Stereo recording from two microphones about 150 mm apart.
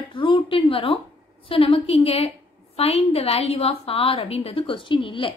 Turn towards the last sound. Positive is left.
turn(degrees=35)  # may be behind; listen again after turning